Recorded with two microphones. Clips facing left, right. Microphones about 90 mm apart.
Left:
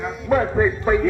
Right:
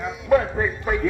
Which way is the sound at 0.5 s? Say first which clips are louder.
Left 6 dB; 20° left (ahead or behind).